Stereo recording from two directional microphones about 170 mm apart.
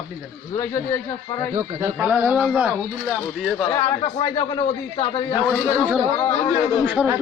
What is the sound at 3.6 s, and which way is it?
A man's voice, 20° left (ahead or behind).